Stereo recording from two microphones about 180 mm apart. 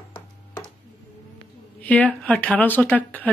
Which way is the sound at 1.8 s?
10° left (ahead or behind).